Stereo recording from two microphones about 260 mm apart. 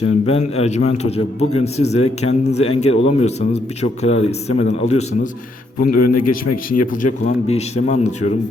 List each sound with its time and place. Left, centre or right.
0.0 s speech: left
5.8 s a man's voice: left
6.9 s speech: left